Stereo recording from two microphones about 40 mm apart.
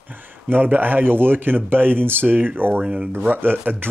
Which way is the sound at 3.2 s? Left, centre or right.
Right.